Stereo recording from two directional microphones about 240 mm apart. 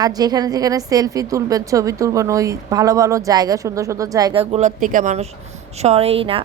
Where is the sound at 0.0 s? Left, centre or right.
Centre.